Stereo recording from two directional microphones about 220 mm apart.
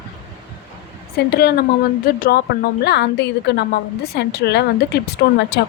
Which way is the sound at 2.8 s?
50° left (ahead or behind).